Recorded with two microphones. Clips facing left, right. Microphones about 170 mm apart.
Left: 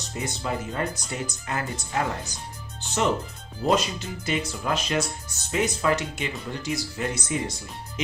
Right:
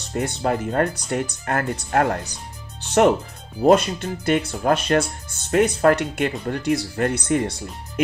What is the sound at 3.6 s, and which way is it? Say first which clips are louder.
Speech: right 8 dB; 60° right (ahead or behind).